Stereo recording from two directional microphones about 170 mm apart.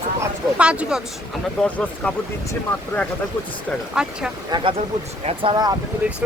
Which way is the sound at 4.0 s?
5° right (ahead or behind).